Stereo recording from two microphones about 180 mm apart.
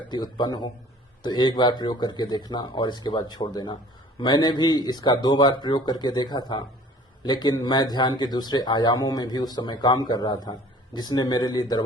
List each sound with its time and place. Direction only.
0.1 s speech: 25° left (ahead or behind)